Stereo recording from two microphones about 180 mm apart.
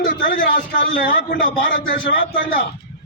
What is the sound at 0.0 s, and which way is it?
A man's voice, 55° left (ahead or behind).